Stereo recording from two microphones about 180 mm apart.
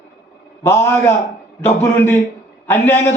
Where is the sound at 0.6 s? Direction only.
15° left (ahead or behind).